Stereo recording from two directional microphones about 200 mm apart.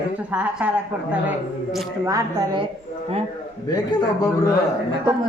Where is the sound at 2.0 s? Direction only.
20° right (ahead or behind).